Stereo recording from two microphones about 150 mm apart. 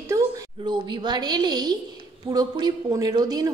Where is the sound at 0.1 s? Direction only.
25° right (ahead or behind).